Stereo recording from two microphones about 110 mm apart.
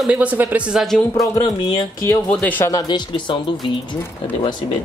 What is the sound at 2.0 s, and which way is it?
Speech, 25° left (ahead or behind).